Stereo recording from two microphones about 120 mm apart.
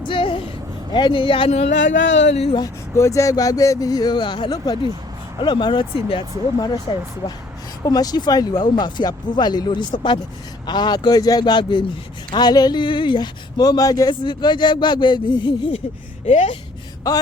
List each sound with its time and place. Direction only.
0.1 s a sound: 45° left (ahead or behind)
0.9 s speech: 40° left (ahead or behind)
1.5 s speech: 65° left (ahead or behind)
2.9 s speech: 25° left (ahead or behind); by 7.0 s 45° left (ahead or behind)
7.9 s speech: 35° left (ahead or behind)
16.2 s speech: 75° left (ahead or behind)
17.1 s speech: 30° left (ahead or behind)